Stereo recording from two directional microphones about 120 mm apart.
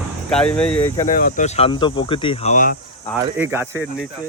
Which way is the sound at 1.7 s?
40° left (ahead or behind).